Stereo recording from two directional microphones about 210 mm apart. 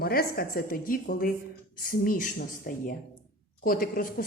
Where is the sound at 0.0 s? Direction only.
45° left (ahead or behind).